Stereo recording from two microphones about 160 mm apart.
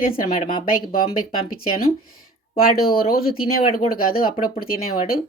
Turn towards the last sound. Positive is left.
turn(degrees=65)  # may be behind; listen again after turning